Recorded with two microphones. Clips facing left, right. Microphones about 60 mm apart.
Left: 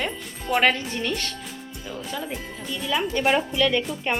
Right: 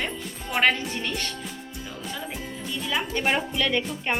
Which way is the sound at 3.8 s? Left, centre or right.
Centre.